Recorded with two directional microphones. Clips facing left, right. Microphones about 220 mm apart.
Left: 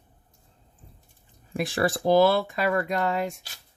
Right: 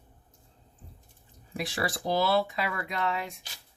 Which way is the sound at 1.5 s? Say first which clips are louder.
Left 7 dB; 50° left (ahead or behind).